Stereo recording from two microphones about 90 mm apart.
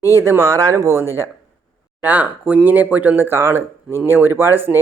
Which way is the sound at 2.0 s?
20° right (ahead or behind).